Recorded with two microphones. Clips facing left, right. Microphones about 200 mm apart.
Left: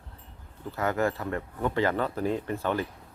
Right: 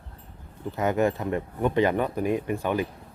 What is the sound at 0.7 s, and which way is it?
Speech, 20° right (ahead or behind).